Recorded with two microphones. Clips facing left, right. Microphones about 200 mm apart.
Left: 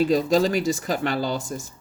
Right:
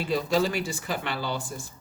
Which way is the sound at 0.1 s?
40° left (ahead or behind).